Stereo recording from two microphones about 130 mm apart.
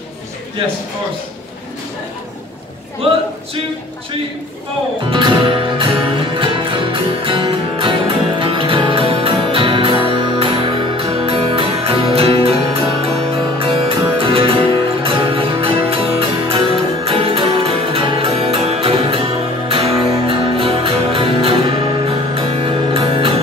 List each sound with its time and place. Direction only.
5.1 s music: 40° right (ahead or behind)